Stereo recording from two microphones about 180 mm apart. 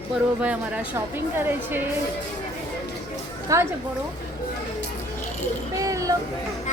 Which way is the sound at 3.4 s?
15° right (ahead or behind).